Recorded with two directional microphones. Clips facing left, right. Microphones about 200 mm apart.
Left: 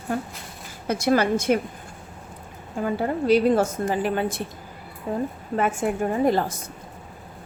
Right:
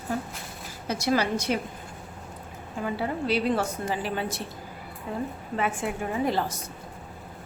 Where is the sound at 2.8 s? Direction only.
45° left (ahead or behind).